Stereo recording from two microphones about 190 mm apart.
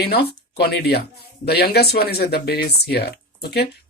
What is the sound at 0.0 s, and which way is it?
Speech, 55° left (ahead or behind).